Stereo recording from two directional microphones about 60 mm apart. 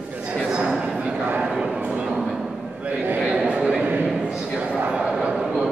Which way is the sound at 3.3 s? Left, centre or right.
Centre.